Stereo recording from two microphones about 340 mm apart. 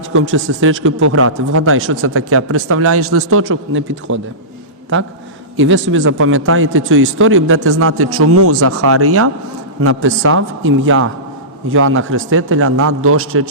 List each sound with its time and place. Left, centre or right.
0.1 s a man's voice: right
5.5 s a man's voice: right